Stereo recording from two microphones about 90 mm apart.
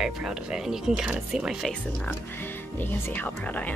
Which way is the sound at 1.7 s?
10° left (ahead or behind).